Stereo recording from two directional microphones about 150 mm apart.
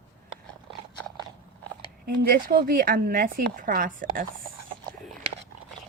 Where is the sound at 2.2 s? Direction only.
80° right; by 4.2 s 65° right (ahead or behind).